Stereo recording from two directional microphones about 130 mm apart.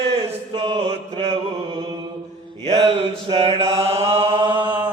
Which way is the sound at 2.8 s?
50° right (ahead or behind).